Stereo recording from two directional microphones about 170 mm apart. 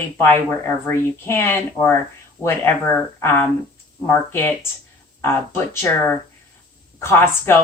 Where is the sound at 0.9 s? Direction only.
15° left (ahead or behind).